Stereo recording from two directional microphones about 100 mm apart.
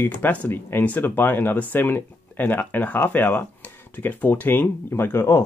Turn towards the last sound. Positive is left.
turn(degrees=30)  # may be behind; listen again after turning